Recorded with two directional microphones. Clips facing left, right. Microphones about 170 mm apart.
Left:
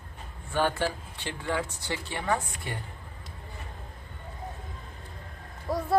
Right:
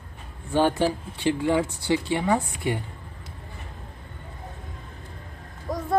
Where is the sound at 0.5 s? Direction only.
15° right (ahead or behind).